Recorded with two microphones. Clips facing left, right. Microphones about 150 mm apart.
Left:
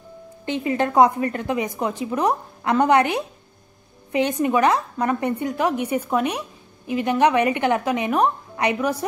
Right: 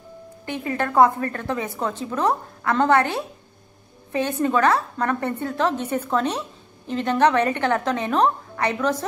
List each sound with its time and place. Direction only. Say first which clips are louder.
0.5 s a woman's voice: left 4 dB; 20° left (ahead or behind)